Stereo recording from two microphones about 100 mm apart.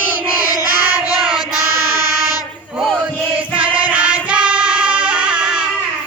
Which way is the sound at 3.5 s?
15° right (ahead or behind).